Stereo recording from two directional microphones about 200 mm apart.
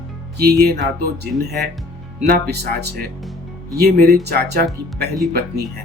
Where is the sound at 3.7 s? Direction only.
50° right (ahead or behind).